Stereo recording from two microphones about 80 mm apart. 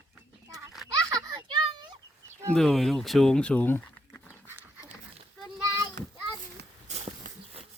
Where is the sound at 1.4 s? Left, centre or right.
Right.